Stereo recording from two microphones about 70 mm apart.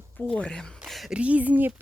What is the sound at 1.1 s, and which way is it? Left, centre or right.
Speech, centre.